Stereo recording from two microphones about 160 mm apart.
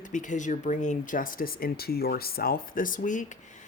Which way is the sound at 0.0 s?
50° left (ahead or behind).